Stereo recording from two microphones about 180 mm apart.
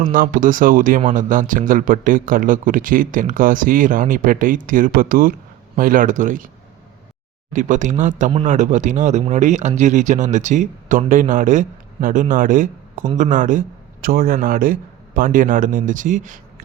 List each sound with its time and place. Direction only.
0.0 s speech: 50° right (ahead or behind)
7.5 s speech: 45° right (ahead or behind)